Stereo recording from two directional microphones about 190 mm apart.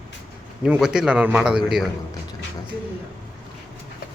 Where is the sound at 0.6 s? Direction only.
5° right (ahead or behind).